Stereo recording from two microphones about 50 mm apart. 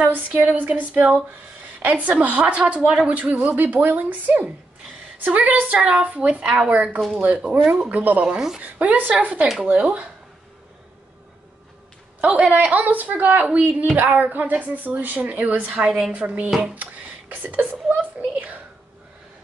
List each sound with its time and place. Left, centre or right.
0.0 s a woman's voice: right
5.8 s a woman's voice: centre
6.0 s a woman's voice: right
12.2 s speech: centre
12.5 s a woman's voice: right
16.7 s a sound: right
17.8 s speech: right